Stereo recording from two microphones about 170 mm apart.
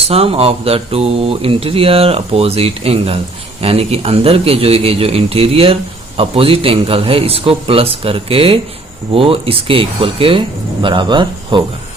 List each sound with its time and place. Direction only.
0.1 s speech: 35° right (ahead or behind)